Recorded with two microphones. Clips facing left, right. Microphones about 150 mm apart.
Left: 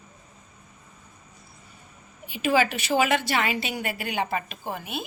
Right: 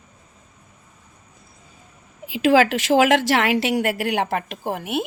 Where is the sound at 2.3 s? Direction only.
90° right.